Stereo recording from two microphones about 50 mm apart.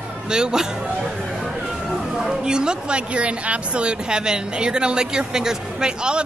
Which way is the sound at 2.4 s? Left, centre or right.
Centre.